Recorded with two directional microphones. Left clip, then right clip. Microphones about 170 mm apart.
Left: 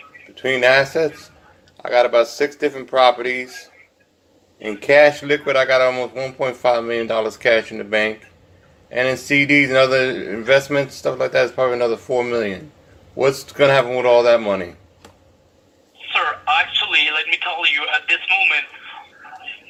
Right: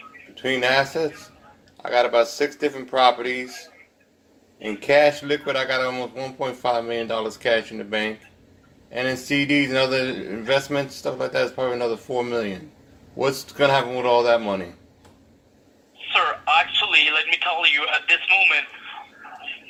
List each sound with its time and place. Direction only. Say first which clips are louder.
0.3 s a man's voice: left 6 dB; centre (ahead or behind)
4.6 s a man's voice: left 5 dB; centre (ahead or behind)
16.0 s telephone: left 1 dB; 25° right (ahead or behind)